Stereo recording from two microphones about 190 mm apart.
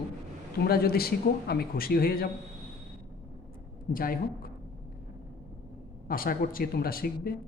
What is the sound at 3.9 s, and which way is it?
Speech, 50° left (ahead or behind).